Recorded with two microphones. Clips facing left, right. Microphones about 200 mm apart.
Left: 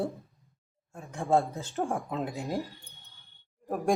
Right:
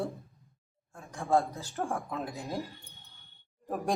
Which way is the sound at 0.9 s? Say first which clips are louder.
Left 2 dB; 20° left (ahead or behind).